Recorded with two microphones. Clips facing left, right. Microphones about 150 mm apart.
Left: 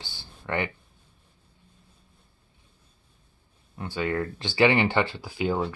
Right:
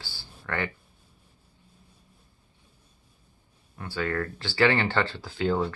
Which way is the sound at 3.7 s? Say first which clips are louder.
Left 2 dB; 20° left (ahead or behind).